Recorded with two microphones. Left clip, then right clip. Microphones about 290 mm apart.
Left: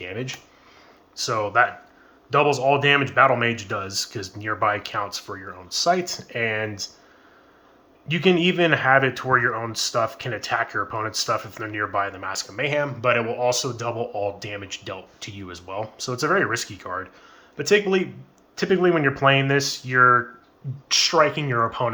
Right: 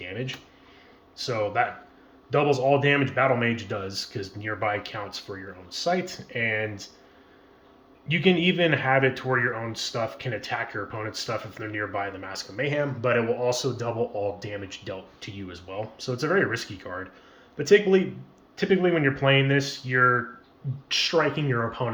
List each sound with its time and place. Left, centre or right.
0.0 s a sound: centre
1.1 s speech: centre
8.0 s speech: centre